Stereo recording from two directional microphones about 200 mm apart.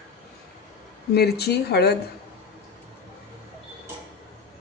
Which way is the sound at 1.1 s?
55° left (ahead or behind).